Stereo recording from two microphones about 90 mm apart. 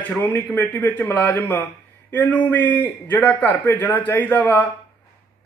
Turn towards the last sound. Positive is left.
turn(degrees=20)  # may be behind; listen again after turning